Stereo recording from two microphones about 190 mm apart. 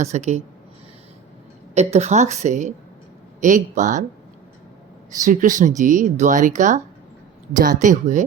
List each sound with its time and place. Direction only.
0.0 s speech: 35° right (ahead or behind)
1.7 s speech: 35° right (ahead or behind)
5.2 s speech: 45° right (ahead or behind)